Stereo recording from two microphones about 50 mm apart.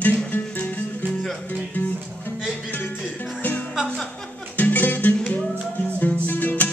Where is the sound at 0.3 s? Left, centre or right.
Left.